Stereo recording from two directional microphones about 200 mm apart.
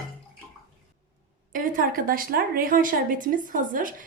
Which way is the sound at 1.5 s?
40° right (ahead or behind).